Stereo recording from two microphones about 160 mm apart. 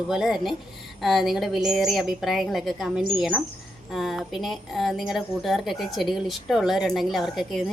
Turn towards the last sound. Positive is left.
turn(degrees=0)  # may be behind; listen again after turning